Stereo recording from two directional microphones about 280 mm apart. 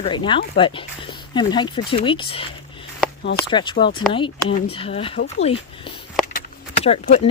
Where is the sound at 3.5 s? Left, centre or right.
Centre.